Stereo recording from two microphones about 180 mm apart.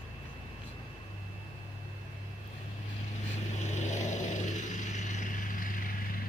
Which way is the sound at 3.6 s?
40° left (ahead or behind).